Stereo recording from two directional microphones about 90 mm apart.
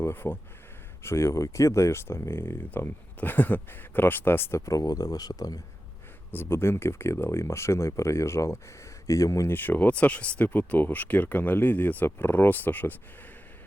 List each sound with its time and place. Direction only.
0.0 s speech: 25° left (ahead or behind); by 5.5 s 45° left (ahead or behind)
6.3 s speech: 25° left (ahead or behind)
9.5 s speech: 20° left (ahead or behind)